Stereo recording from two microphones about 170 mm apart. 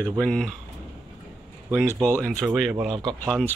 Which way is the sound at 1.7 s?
15° right (ahead or behind).